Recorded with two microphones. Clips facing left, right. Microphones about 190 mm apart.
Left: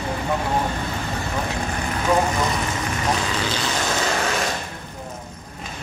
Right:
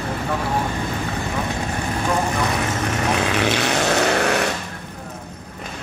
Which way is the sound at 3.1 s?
70° right (ahead or behind).